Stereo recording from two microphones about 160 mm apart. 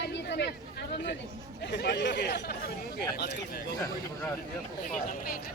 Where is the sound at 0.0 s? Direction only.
90° left.